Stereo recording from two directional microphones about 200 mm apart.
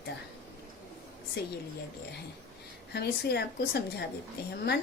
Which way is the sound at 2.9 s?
55° left (ahead or behind).